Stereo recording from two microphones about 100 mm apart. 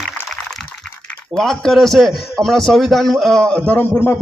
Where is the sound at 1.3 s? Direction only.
5° left (ahead or behind).